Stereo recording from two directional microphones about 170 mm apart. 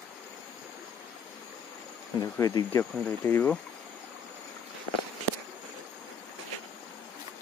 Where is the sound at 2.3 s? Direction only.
15° left (ahead or behind).